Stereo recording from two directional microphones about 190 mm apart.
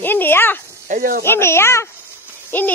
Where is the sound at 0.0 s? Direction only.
10° left (ahead or behind).